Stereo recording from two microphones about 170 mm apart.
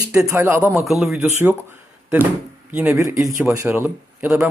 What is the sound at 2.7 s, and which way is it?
A man's voice, 10° right (ahead or behind).